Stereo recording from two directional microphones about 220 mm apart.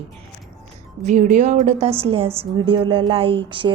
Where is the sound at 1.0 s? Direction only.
35° right (ahead or behind).